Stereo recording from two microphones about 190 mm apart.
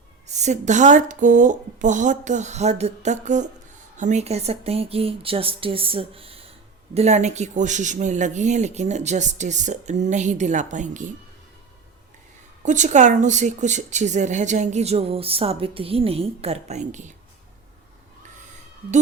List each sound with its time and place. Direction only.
0.3 s a woman's voice: 40° right (ahead or behind)
12.6 s a woman's voice: 40° right (ahead or behind)